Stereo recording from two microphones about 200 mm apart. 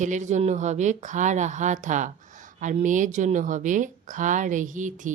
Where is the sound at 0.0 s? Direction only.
35° right (ahead or behind).